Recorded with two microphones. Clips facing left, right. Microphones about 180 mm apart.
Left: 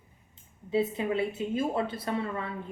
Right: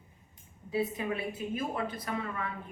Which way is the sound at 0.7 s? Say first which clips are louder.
Left 4 dB; 25° left (ahead or behind).